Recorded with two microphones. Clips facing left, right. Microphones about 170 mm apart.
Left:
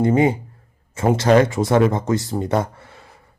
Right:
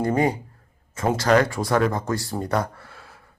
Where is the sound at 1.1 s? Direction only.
25° left (ahead or behind).